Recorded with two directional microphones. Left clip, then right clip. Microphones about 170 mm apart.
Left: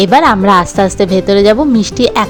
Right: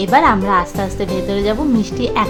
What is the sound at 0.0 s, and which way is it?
A woman's voice, 45° left (ahead or behind).